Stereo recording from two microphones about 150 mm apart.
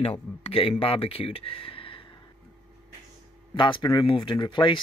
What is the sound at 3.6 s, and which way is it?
Speech, 35° left (ahead or behind).